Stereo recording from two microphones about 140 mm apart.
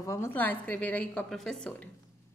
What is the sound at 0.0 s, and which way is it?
A woman's voice, 20° left (ahead or behind).